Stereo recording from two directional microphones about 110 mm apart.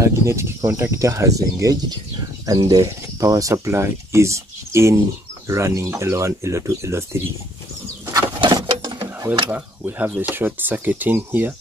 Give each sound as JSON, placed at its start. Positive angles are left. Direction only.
{"t": 0.0, "sound": "speech", "side_deg": -25}
{"t": 8.5, "sound": "sewing machine", "side_deg": -35}
{"t": 9.5, "sound": "speech", "side_deg": -15}